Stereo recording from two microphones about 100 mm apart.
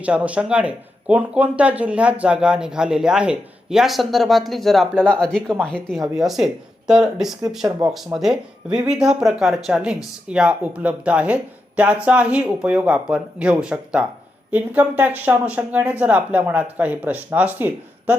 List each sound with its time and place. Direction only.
0.0 s speech: 15° right (ahead or behind)